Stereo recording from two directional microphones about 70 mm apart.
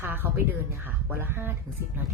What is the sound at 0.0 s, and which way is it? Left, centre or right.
A woman's voice, right.